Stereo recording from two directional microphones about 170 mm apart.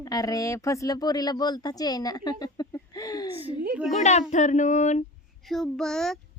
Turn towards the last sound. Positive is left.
turn(degrees=0)  # may be behind; listen again after turning